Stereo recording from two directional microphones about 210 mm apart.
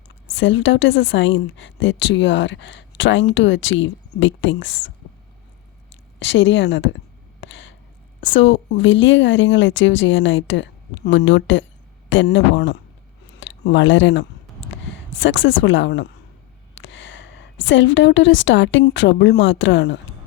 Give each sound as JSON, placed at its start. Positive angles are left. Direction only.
{"t": 0.3, "sound": "speech", "side_deg": 60}
{"t": 6.1, "sound": "speech", "side_deg": 60}
{"t": 7.4, "sound": "a sound", "side_deg": 65}
{"t": 8.2, "sound": "a woman's voice", "side_deg": 65}